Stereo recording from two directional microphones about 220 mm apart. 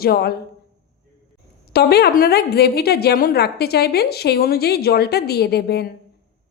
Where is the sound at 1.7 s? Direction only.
45° left (ahead or behind).